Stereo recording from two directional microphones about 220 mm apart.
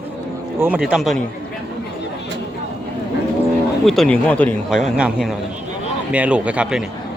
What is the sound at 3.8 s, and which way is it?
A man's voice, centre (ahead or behind).